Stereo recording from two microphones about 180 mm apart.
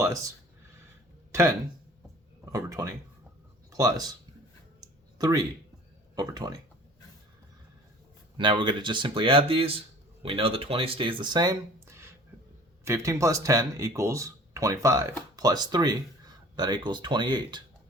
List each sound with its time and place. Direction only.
0.0 s speech: 20° right (ahead or behind)
1.3 s speech: 15° right (ahead or behind)
4.8 s a sound: 20° right (ahead or behind)
6.1 s speech: 20° right (ahead or behind)
8.4 s speech: 25° right (ahead or behind)